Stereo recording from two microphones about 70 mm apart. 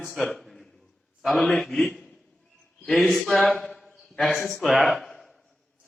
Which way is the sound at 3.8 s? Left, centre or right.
Centre.